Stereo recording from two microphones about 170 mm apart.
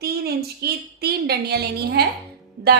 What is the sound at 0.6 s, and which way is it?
A woman's voice, 70° right (ahead or behind).